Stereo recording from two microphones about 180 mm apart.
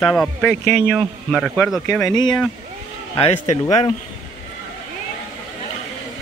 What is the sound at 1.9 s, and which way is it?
Speech, 20° left (ahead or behind).